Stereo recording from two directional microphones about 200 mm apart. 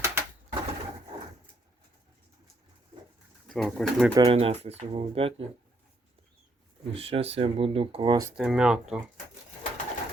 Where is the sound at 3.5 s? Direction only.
Centre (ahead or behind).